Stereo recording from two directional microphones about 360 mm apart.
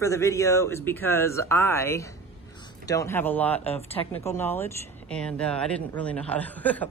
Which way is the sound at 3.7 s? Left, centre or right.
Centre.